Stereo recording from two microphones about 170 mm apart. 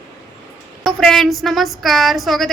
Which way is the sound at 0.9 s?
Centre (ahead or behind).